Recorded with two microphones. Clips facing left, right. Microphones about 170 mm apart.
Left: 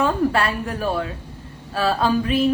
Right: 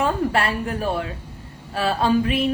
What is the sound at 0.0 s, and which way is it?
A woman's voice, 30° right (ahead or behind).